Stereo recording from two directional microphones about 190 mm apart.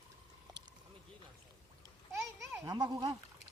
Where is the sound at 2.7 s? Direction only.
20° right (ahead or behind).